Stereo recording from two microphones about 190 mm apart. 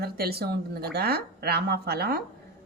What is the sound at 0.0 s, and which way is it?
A woman's voice, 55° right (ahead or behind).